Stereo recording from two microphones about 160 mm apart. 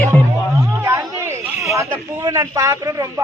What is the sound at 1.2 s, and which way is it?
A man's voice, 15° right (ahead or behind).